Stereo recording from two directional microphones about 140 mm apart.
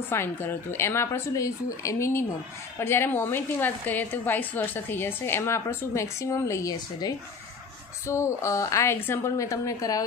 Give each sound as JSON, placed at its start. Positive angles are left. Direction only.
{"t": 0.1, "sound": "a woman's voice", "side_deg": 15}